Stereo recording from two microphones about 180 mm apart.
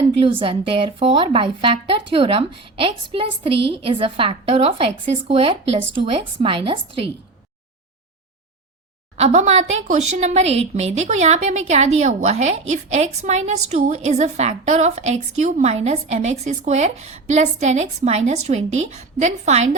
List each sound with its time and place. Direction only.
0.2 s speech: 30° right (ahead or behind)
9.1 s a woman's voice: 35° right (ahead or behind)